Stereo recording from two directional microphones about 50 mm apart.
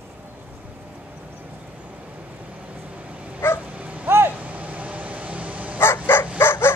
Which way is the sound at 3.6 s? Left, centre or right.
Right.